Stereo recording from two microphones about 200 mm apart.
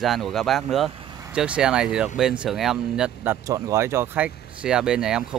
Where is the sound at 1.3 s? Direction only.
5° right (ahead or behind).